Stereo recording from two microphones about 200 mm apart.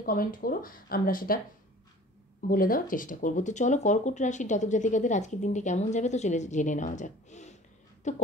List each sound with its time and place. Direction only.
0.0 s speech: 45° left (ahead or behind)
2.4 s speech: 45° left (ahead or behind)